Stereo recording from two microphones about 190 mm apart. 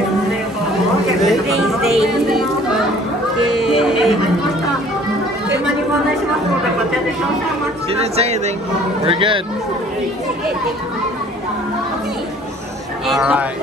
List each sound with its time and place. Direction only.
1.2 s chatter: centre (ahead or behind)
3.5 s music: centre (ahead or behind)
7.9 s speech: 35° right (ahead or behind)
13.2 s speech: 5° right (ahead or behind)